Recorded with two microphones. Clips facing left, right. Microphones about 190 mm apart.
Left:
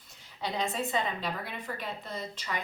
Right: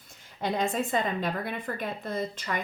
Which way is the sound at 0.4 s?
50° right (ahead or behind).